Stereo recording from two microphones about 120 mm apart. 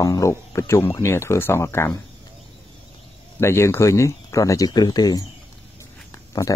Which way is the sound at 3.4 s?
20° left (ahead or behind).